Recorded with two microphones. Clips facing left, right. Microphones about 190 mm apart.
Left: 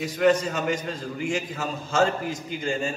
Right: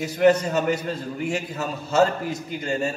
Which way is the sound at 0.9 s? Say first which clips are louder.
Right 2 dB; 40° right (ahead or behind).